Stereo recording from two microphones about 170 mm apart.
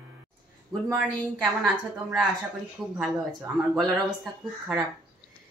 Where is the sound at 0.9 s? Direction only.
Centre (ahead or behind).